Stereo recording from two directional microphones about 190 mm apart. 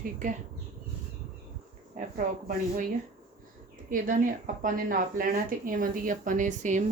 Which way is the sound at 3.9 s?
45° right (ahead or behind).